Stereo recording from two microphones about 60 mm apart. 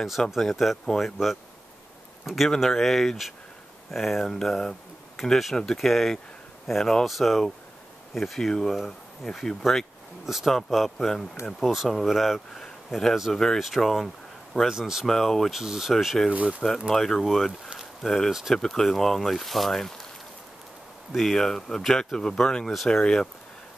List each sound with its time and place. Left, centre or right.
0.4 s speech: centre
12.5 s a sound: centre
13.1 s speech: centre
15.0 s speech: centre
15.5 s speech: centre
16.3 s speech: right
16.9 s speech: centre
17.5 s speech: centre
18.0 s speech: centre
21.1 s speech: centre